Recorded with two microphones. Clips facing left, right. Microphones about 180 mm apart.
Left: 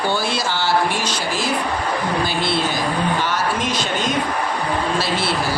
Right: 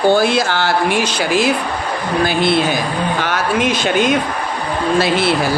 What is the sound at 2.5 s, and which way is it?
Speech, 60° right (ahead or behind).